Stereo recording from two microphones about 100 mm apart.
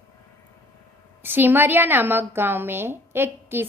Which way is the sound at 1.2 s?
20° right (ahead or behind).